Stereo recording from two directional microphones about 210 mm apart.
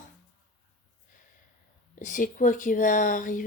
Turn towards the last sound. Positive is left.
turn(degrees=40)  # may be behind; listen again after turning